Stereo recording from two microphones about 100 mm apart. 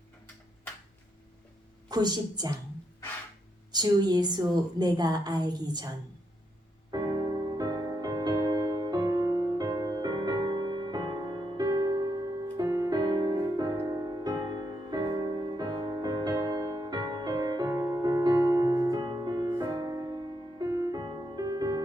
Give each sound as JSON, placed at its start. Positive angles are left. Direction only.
{"t": 1.9, "sound": "a woman's voice", "side_deg": -45}
{"t": 3.7, "sound": "a woman's voice", "side_deg": -45}
{"t": 6.9, "sound": "music", "side_deg": -45}
{"t": 12.9, "sound": "music", "side_deg": -45}
{"t": 21.0, "sound": "music", "side_deg": -45}